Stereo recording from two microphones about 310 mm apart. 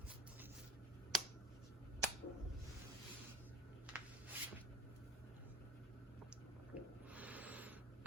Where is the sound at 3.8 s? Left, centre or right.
Centre.